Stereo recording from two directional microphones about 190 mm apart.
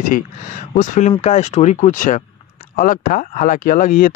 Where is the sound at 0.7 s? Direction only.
40° left (ahead or behind).